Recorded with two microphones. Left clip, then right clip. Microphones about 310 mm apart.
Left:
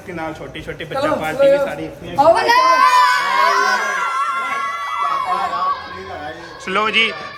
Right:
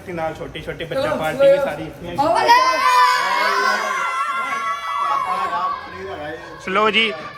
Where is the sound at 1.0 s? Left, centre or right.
Centre.